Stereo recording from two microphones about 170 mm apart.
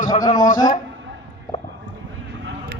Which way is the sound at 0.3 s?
50° left (ahead or behind).